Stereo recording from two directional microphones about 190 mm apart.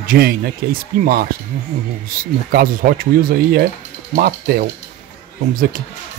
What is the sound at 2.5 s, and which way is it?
Speech, 50° right (ahead or behind).